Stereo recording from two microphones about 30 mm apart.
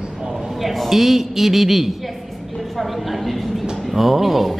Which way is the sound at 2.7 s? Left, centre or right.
Centre.